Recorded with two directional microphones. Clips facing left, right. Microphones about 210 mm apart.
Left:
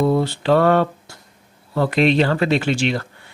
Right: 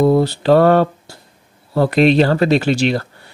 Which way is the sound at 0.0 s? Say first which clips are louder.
Right 5 dB; 40° right (ahead or behind).